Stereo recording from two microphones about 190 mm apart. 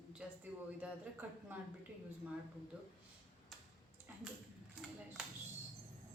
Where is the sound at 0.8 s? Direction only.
10° right (ahead or behind).